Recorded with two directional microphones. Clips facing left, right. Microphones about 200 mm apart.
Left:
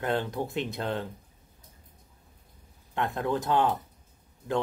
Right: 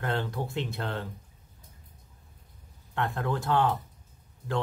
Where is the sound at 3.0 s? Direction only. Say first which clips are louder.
Left 2 dB; 20° left (ahead or behind).